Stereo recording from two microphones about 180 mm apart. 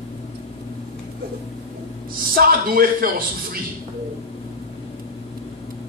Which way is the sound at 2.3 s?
55° right (ahead or behind).